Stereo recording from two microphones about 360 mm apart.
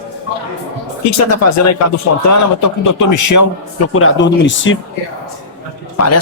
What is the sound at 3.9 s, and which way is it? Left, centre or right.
Speech, left.